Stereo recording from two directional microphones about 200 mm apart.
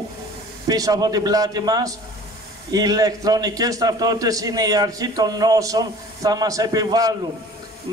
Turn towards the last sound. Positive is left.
turn(degrees=-15)  # may be behind; listen again after turning